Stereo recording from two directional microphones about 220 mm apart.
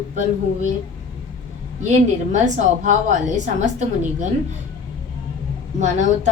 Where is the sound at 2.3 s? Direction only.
35° right (ahead or behind).